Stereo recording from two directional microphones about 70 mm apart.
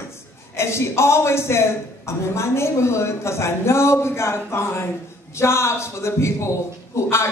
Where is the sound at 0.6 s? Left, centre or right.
Left.